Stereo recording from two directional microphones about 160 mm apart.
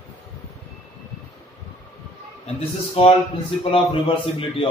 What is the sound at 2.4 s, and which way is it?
A man's voice, 35° left (ahead or behind).